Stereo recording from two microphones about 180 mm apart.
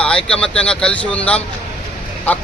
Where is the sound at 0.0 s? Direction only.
5° left (ahead or behind).